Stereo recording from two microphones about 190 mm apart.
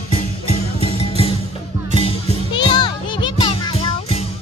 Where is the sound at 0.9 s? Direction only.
30° left (ahead or behind).